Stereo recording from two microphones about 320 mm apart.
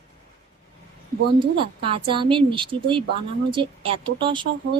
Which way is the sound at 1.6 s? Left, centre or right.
Centre.